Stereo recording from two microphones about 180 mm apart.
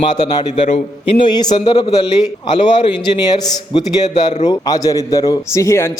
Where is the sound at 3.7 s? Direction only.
20° left (ahead or behind).